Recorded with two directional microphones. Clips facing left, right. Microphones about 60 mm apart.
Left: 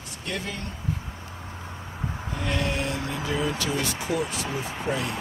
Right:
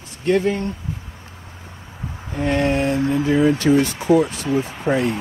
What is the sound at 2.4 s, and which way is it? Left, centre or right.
Speech, right.